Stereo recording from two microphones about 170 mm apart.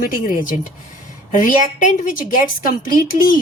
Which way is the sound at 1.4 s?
50° left (ahead or behind).